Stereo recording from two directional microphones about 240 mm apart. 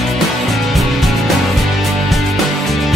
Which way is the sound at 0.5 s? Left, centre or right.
Centre.